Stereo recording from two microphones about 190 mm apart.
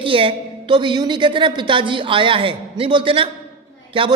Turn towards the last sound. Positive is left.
turn(degrees=-25)  # may be behind; listen again after turning